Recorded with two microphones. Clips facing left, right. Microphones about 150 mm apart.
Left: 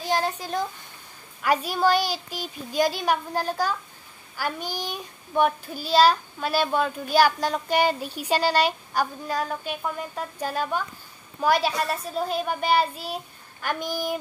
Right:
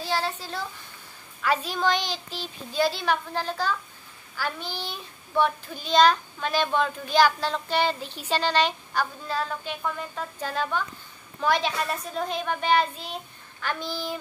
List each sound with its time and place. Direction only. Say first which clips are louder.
0.0 s a child's voice: left 3 dB; 15° left (ahead or behind)